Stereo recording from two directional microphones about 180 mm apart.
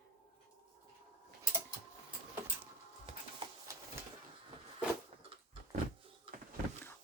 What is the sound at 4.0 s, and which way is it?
Vehicle, 15° right (ahead or behind).